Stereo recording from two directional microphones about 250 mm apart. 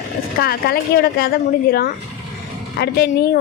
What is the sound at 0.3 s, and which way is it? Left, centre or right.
Speech, left.